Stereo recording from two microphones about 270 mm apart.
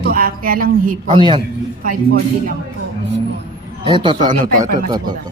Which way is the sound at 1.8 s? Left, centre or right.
Right.